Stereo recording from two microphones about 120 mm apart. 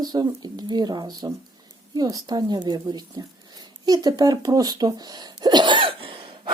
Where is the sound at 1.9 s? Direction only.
30° right (ahead or behind).